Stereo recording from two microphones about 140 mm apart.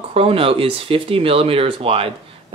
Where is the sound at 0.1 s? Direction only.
40° right (ahead or behind).